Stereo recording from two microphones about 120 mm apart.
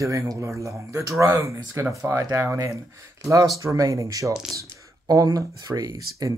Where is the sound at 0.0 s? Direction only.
25° right (ahead or behind).